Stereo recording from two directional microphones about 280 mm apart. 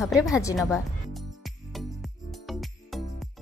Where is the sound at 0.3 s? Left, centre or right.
Centre.